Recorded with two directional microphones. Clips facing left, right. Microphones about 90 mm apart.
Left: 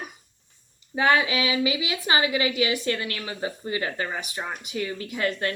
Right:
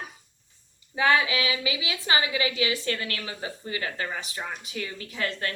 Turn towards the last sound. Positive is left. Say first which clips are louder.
# left 4 dB
turn(degrees=25)  # may be behind; listen again after turning